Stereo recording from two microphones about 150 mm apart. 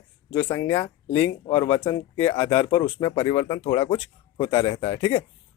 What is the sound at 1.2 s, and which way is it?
Speech, 30° left (ahead or behind).